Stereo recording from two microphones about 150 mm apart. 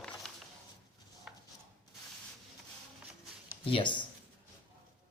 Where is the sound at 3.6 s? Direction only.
35° left (ahead or behind).